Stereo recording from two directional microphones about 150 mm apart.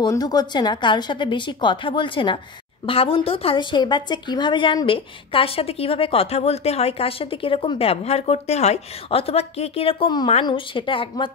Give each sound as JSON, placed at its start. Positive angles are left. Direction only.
{"t": 0.0, "sound": "speech", "side_deg": 25}